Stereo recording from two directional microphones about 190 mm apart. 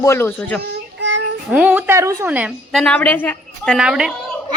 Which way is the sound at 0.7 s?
75° right (ahead or behind).